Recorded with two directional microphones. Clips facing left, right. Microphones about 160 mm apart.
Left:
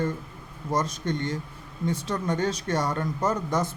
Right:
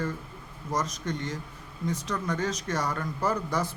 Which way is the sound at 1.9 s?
30° left (ahead or behind).